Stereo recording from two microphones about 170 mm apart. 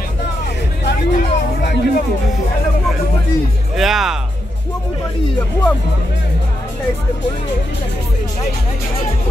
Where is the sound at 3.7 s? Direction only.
Centre (ahead or behind).